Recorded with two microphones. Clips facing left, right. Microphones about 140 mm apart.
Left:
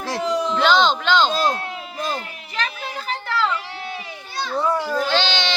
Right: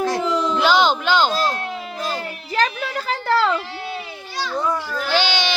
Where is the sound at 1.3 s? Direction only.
20° left (ahead or behind).